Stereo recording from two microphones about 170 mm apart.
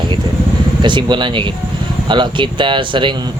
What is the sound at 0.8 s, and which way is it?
Speech, 25° right (ahead or behind).